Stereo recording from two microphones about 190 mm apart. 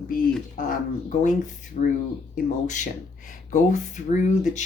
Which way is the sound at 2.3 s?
40° left (ahead or behind).